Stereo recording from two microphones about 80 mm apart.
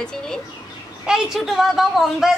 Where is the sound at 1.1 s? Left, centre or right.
Centre.